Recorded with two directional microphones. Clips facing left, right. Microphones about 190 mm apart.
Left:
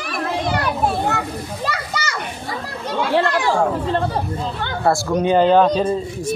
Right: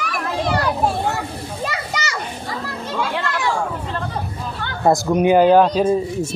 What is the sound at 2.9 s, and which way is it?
Speech, 30° left (ahead or behind).